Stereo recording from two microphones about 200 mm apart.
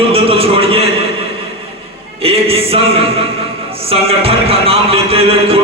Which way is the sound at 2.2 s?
30° right (ahead or behind).